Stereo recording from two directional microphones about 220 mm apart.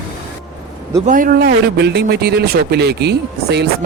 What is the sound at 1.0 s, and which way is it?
A man's voice, 40° right (ahead or behind).